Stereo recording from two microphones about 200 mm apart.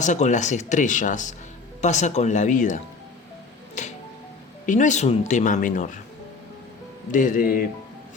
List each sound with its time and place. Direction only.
0.0 s speech: 40° left (ahead or behind)
3.8 s music: 35° left (ahead or behind)
4.6 s speech: 40° left (ahead or behind)
7.1 s speech: 40° left (ahead or behind)